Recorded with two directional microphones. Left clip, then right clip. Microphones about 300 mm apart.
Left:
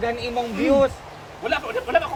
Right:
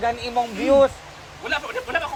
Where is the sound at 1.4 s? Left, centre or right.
Centre.